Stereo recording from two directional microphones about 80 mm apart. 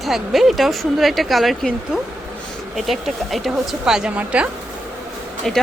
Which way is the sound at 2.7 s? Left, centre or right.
Centre.